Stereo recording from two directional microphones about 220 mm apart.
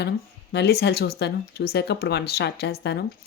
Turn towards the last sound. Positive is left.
turn(degrees=45)  # may be behind; listen again after turning